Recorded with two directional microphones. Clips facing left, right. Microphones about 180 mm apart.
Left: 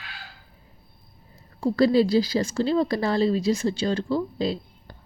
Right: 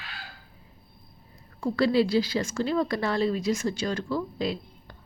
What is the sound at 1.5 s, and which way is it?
A woman's voice, 40° left (ahead or behind).